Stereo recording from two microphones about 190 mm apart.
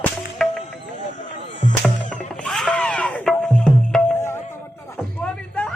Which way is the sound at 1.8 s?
5° left (ahead or behind).